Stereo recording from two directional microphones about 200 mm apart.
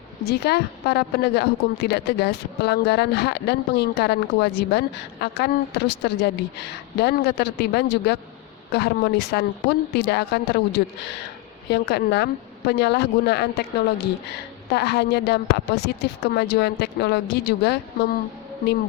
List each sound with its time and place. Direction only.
0.3 s a woman's voice: 55° left (ahead or behind)